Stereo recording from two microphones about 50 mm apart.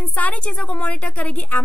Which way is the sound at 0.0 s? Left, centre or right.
Left.